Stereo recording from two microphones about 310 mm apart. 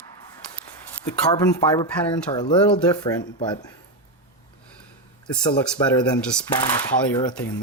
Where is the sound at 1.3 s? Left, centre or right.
Centre.